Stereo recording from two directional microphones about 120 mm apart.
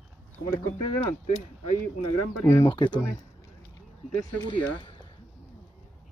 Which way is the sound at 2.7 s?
40° left (ahead or behind).